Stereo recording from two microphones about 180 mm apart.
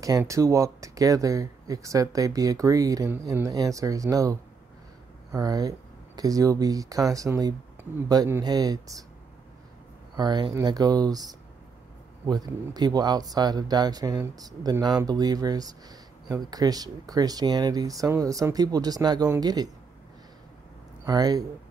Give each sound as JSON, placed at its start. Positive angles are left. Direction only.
{"t": 0.0, "sound": "speech", "side_deg": -20}
{"t": 10.1, "sound": "speech", "side_deg": -25}
{"t": 12.3, "sound": "speech", "side_deg": -20}
{"t": 21.0, "sound": "speech", "side_deg": -20}